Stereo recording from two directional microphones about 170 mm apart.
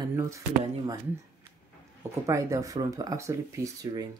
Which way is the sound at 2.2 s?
20° right (ahead or behind).